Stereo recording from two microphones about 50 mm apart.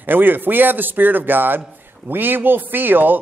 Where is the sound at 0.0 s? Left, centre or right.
Right.